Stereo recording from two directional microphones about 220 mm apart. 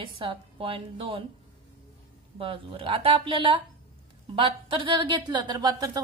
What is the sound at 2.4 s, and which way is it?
A woman's voice, 25° right (ahead or behind).